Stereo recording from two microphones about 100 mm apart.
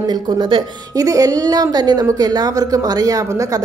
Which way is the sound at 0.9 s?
35° right (ahead or behind).